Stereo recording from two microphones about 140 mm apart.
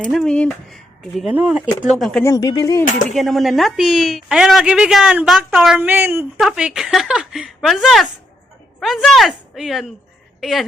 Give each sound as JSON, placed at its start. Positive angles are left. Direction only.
{"t": 0.0, "sound": "a woman's voice", "side_deg": 0}
{"t": 2.2, "sound": "speech", "side_deg": 25}
{"t": 2.8, "sound": "speech", "side_deg": 65}
{"t": 3.2, "sound": "a woman's voice", "side_deg": 0}
{"t": 6.4, "sound": "a woman's voice", "side_deg": -5}